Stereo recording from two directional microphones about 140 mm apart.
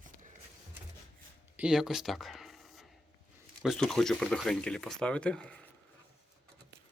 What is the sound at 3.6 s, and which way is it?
Speech, 5° left (ahead or behind).